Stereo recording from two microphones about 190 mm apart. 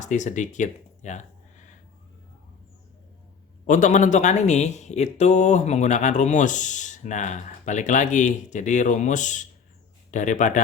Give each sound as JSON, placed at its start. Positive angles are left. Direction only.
{"t": 0.0, "sound": "speech", "side_deg": 40}
{"t": 3.7, "sound": "speech", "side_deg": 40}